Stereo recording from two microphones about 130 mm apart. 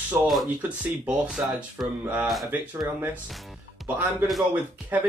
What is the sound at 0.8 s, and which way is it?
Speech, 5° right (ahead or behind).